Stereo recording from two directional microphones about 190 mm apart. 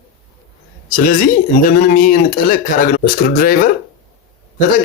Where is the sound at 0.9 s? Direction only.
45° left (ahead or behind).